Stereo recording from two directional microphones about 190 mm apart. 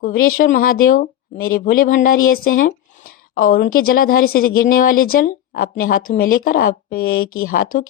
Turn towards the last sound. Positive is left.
turn(degrees=45)  # may be behind; listen again after turning